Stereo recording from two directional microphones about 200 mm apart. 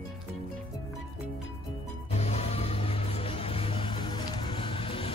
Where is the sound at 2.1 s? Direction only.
30° left (ahead or behind).